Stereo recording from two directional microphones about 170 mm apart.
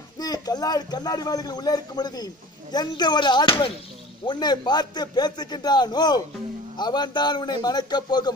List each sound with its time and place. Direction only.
0.2 s a man's voice: 25° left (ahead or behind)